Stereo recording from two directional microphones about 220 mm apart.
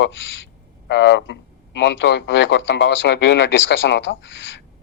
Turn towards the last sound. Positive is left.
turn(degrees=60)  # may be behind; listen again after turning